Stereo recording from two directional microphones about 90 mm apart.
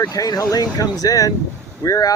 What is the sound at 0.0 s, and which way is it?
Speech, 40° left (ahead or behind).